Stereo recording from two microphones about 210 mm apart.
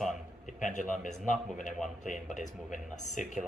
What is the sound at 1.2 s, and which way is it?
Speech, centre (ahead or behind).